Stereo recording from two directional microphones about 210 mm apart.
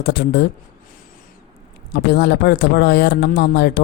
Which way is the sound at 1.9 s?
50° left (ahead or behind).